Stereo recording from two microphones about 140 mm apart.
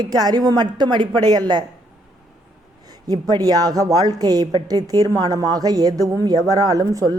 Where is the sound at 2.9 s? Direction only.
25° right (ahead or behind).